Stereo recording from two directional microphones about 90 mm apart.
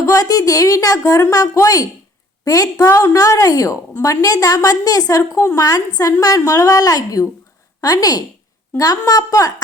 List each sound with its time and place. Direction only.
0.0 s a woman's voice: 40° left (ahead or behind)